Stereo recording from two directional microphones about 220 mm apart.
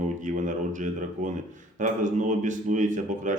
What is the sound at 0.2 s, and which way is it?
A man's voice, 35° right (ahead or behind).